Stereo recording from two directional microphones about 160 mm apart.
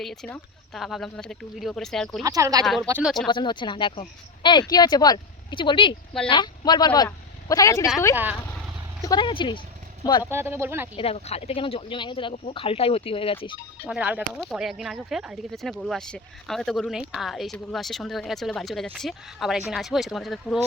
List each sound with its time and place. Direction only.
0.0 s speech: centre (ahead or behind)
2.2 s speech: 20° right (ahead or behind)
3.0 s speech: centre (ahead or behind)
3.2 s a man's voice: 30° left (ahead or behind)
8.1 s speech: 10° right (ahead or behind)
9.0 s a man's voice: 30° left (ahead or behind)
10.2 s speech: 15° right (ahead or behind)
10.9 s speech: 35° left (ahead or behind)
13.8 s speech: 10° right (ahead or behind)